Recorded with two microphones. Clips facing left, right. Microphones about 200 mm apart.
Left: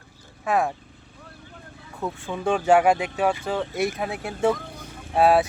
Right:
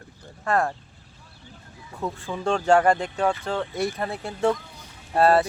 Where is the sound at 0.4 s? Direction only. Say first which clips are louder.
Left 1 dB; 5° left (ahead or behind).